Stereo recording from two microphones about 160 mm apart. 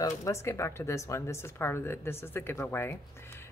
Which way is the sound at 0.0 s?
20° left (ahead or behind).